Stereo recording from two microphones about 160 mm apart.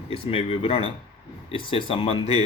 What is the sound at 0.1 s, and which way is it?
Speech, 35° left (ahead or behind).